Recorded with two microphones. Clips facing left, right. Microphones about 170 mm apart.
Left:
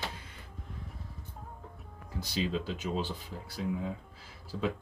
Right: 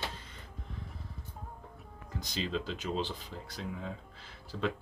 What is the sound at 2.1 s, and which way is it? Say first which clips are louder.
Speech: left 3 dB; 10° left (ahead or behind).